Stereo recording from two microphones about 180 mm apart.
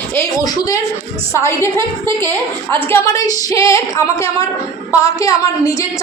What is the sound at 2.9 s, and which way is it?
Speech, 20° left (ahead or behind).